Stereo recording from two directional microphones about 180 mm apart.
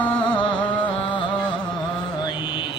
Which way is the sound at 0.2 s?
25° left (ahead or behind).